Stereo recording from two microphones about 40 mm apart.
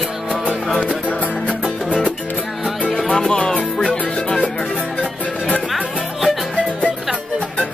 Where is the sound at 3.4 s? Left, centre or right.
Left.